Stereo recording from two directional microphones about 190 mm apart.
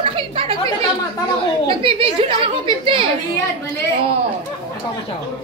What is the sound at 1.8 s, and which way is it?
A woman's voice, 30° right (ahead or behind).